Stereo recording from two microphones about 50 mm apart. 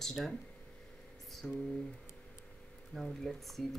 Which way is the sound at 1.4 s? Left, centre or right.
Centre.